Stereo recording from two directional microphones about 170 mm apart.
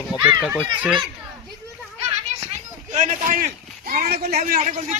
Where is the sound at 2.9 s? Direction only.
45° right (ahead or behind); by 4.3 s 60° right (ahead or behind).